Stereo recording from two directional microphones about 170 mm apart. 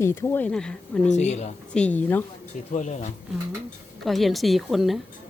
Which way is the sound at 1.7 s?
10° left (ahead or behind).